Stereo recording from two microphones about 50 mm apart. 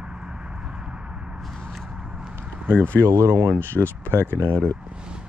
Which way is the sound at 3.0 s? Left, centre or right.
Right.